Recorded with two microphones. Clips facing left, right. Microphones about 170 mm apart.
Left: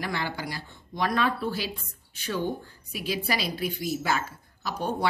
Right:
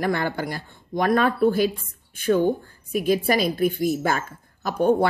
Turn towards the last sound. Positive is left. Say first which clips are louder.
# right 11 dB
turn(degrees=-55)  # may be behind; listen again after turning